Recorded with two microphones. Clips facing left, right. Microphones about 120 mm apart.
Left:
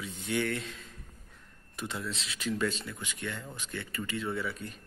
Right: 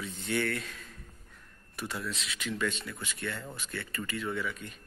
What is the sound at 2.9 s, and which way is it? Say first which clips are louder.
Speech: right 1 dB; 15° left (ahead or behind).